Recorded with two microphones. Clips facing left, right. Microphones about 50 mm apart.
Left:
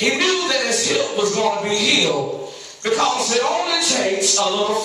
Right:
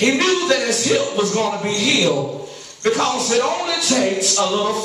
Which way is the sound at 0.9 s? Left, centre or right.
Right.